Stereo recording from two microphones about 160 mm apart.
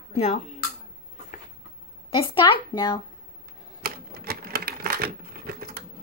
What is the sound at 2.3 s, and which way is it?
Speech, 30° left (ahead or behind).